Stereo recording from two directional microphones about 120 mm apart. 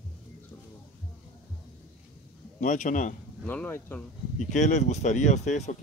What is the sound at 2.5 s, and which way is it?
Speech, 90° left.